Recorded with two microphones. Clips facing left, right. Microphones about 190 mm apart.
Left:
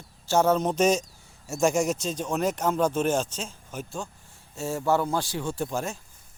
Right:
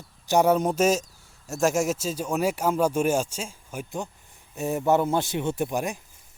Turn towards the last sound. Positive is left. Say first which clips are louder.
# right 3 dB
turn(degrees=-15)  # may be behind; listen again after turning